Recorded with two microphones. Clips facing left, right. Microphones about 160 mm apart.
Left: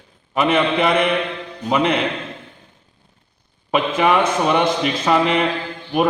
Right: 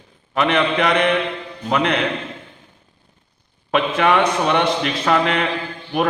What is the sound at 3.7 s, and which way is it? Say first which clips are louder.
Speech: even; 5° left (ahead or behind).